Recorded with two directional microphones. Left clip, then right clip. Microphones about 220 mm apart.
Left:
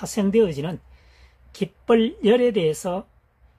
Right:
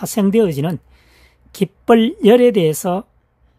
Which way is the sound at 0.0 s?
45° right (ahead or behind).